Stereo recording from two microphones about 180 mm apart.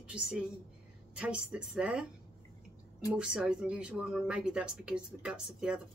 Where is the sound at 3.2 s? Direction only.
5° right (ahead or behind).